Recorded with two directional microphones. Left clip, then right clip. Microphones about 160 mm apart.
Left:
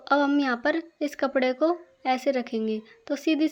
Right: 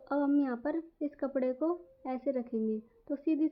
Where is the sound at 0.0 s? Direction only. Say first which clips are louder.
Left 8 dB; 20° left (ahead or behind).